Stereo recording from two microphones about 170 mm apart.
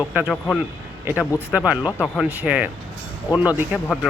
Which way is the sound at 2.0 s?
5° left (ahead or behind).